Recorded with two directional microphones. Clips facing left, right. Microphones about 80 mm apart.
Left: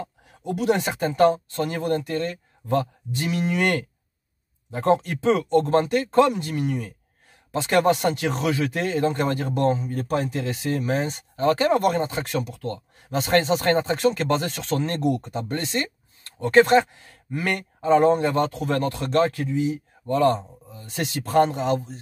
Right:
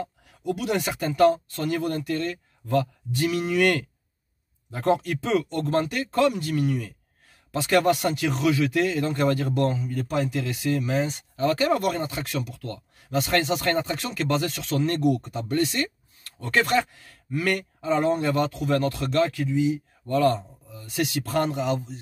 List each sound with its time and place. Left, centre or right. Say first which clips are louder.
0.0 s speech: right 2 dB; left
20.2 s speech: left 1 dB; left